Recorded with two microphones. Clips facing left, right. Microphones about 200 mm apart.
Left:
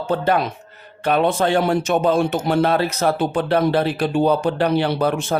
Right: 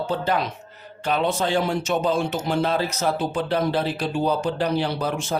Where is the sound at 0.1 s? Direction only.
55° left (ahead or behind).